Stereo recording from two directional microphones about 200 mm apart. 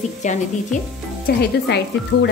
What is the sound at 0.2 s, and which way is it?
Speech, 35° left (ahead or behind).